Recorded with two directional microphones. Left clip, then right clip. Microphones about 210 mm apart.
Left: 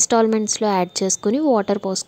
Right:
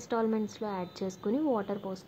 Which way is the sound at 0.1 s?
40° left (ahead or behind).